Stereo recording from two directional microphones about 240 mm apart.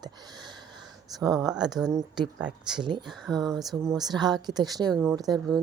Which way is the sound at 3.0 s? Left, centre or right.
Centre.